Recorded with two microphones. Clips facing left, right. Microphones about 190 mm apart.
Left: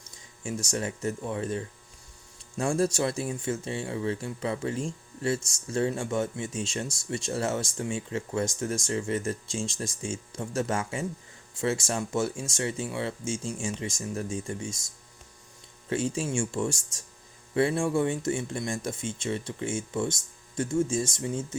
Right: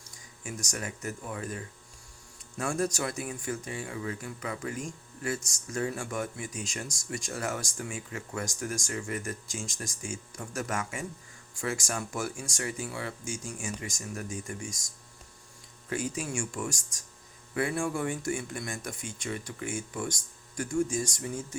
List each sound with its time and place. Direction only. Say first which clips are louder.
0.4 s speech: left 6 dB; 25° left (ahead or behind)
15.9 s speech: left 5 dB; 25° left (ahead or behind)